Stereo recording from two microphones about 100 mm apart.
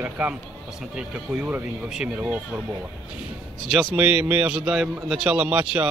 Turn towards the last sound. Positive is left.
turn(degrees=-15)  # may be behind; listen again after turning